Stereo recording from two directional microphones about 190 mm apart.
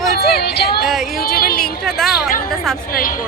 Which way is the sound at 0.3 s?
55° left (ahead or behind).